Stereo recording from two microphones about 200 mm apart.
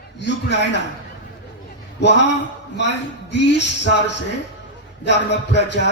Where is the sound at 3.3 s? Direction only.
60° left (ahead or behind).